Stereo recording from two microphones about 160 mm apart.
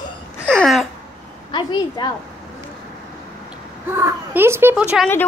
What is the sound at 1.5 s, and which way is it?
Speech, 30° left (ahead or behind).